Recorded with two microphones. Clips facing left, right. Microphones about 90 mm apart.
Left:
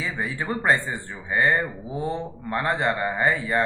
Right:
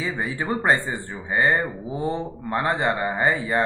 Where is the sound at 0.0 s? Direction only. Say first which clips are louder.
Right 2 dB; 5° right (ahead or behind).